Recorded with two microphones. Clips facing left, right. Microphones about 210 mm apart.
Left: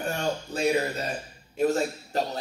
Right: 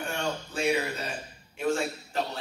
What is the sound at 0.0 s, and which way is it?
Speech, 40° left (ahead or behind).